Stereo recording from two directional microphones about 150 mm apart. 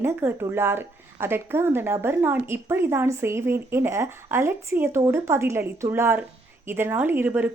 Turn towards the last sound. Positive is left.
turn(degrees=-15)  # may be behind; listen again after turning